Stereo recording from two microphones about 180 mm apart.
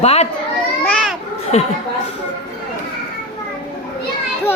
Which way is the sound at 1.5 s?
35° left (ahead or behind).